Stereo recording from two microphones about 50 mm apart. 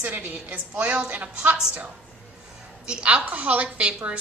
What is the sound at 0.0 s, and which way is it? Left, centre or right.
A woman's voice, right.